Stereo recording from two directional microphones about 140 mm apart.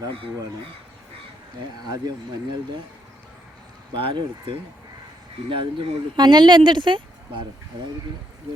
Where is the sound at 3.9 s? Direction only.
35° right (ahead or behind).